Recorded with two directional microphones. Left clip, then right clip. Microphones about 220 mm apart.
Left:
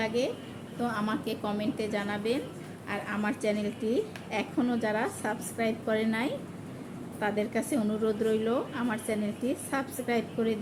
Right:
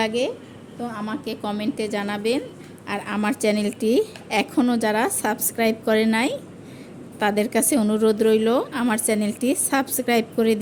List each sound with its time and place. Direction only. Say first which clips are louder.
0.0 s a woman's voice: right 7 dB; 40° right (ahead or behind)
0.8 s a woman's voice: right 2 dB; 15° right (ahead or behind); by 10.6 s 50° right (ahead or behind)